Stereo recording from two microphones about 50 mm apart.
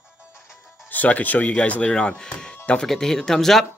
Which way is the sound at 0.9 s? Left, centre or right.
Left.